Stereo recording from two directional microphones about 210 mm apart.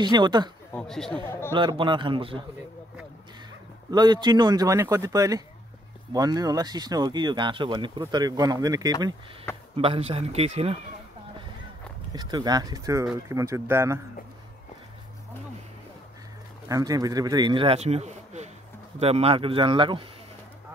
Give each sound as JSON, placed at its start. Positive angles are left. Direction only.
{"t": 0.0, "sound": "speech", "side_deg": -20}
{"t": 0.7, "sound": "speech", "side_deg": 0}
{"t": 1.5, "sound": "speech", "side_deg": -20}
{"t": 3.9, "sound": "speech", "side_deg": -20}
{"t": 12.1, "sound": "speech", "side_deg": -20}
{"t": 16.6, "sound": "speech", "side_deg": -15}